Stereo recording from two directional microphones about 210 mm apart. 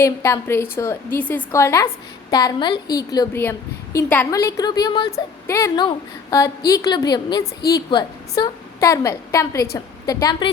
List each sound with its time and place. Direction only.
0.0 s a woman's voice: 15° left (ahead or behind)